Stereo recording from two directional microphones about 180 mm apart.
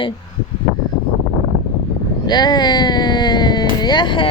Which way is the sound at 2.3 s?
25° left (ahead or behind).